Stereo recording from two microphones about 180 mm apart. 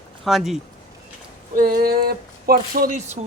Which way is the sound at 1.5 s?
55° right (ahead or behind).